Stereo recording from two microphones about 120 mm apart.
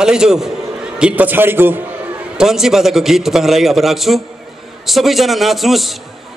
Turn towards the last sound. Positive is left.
turn(degrees=0)  # may be behind; listen again after turning